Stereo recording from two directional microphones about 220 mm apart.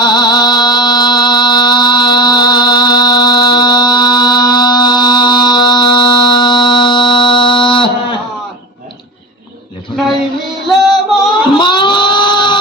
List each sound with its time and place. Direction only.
0.0 s music: 20° left (ahead or behind)
10.7 s music: centre (ahead or behind)
11.5 s a sound: 20° left (ahead or behind)